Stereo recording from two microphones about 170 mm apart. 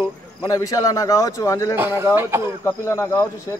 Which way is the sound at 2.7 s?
15° left (ahead or behind).